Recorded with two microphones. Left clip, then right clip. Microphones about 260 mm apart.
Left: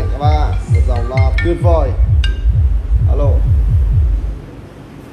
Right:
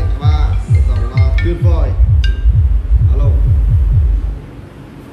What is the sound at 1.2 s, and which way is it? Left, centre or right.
Music, left.